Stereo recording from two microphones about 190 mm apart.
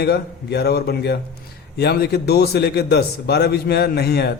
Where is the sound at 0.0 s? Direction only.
60° left (ahead or behind).